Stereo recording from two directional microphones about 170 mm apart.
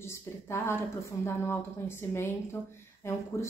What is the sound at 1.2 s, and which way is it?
Speech, 15° left (ahead or behind).